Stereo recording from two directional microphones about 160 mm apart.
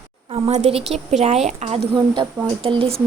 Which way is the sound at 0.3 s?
40° right (ahead or behind).